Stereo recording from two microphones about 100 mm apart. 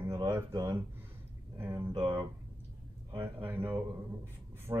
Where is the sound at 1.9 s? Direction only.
55° right (ahead or behind).